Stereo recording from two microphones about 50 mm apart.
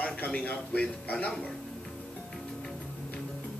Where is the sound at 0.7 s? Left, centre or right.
Left.